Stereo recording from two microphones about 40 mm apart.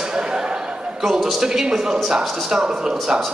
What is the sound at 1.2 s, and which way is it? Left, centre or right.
Speech, centre.